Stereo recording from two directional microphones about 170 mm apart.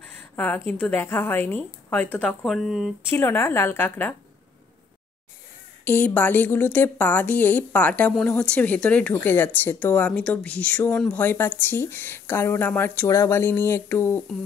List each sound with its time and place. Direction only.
0.0 s speech: 10° left (ahead or behind)
3.1 s speech: 15° left (ahead or behind)
5.9 s speech: 10° left (ahead or behind)